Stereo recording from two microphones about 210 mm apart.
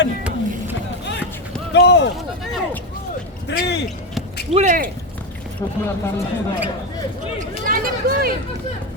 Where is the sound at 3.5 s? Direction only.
55° left (ahead or behind).